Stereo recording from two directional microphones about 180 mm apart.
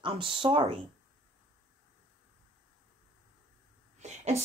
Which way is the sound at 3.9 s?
40° right (ahead or behind).